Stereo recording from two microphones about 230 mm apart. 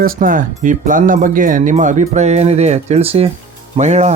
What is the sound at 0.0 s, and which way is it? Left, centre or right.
Speech, right.